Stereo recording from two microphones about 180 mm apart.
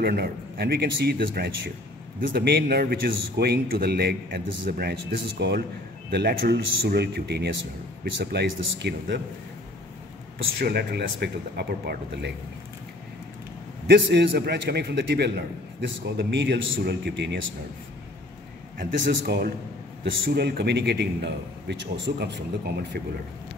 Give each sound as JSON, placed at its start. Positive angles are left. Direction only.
{"t": 0.0, "sound": "a man's voice", "side_deg": -60}
{"t": 10.4, "sound": "a man's voice", "side_deg": -65}
{"t": 13.8, "sound": "a man's voice", "side_deg": -70}
{"t": 16.2, "sound": "a man's voice", "side_deg": -80}
{"t": 18.8, "sound": "a man's voice", "side_deg": -60}